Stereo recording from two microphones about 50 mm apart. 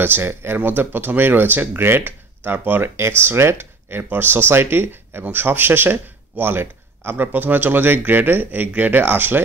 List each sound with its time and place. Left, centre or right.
0.0 s speech: right
0.6 s speech: right